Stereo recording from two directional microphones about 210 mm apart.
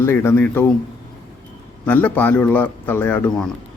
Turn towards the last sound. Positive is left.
turn(degrees=10)  # may be behind; listen again after turning